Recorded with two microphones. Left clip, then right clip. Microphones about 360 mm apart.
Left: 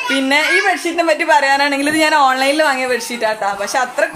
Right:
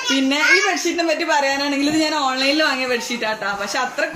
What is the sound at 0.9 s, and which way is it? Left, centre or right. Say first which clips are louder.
A woman's voice: left 5 dB; centre.